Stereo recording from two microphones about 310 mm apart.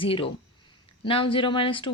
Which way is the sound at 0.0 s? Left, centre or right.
Centre.